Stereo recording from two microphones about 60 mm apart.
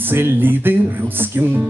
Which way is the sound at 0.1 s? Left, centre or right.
Right.